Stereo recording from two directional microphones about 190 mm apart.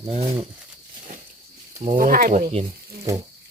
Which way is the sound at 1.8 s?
45° right (ahead or behind).